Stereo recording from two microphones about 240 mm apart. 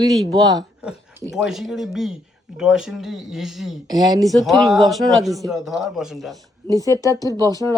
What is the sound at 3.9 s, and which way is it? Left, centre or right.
Speech, centre.